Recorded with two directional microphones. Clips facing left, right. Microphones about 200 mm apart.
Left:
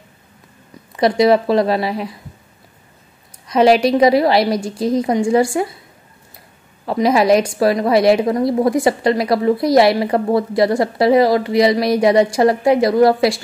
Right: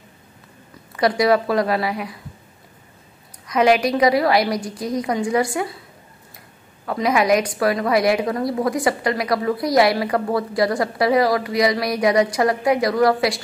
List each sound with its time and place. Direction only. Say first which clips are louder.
0.9 s a woman's voice: left 4 dB; 25° left (ahead or behind)
3.4 s a woman's voice: left 4 dB; 30° left (ahead or behind)
6.9 s a woman's voice: left 5 dB; 30° left (ahead or behind)